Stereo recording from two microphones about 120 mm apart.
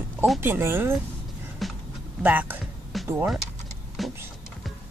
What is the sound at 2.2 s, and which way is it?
Speech, 15° right (ahead or behind).